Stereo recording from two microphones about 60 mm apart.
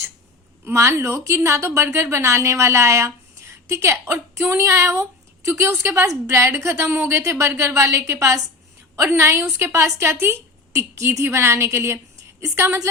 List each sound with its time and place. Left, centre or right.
0.7 s a woman's voice: right